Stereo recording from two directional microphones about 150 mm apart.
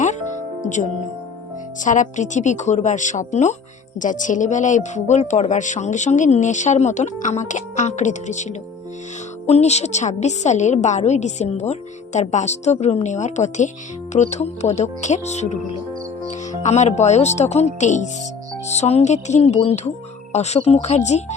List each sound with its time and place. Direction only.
0.6 s a woman's voice: 55° left (ahead or behind)